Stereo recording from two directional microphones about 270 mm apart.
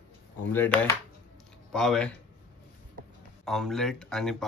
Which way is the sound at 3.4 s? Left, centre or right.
Centre.